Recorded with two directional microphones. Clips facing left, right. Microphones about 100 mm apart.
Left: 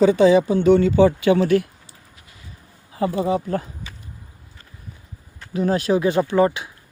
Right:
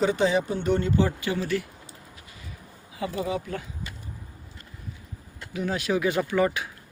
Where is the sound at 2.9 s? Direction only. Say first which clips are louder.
Left 9 dB; 40° left (ahead or behind).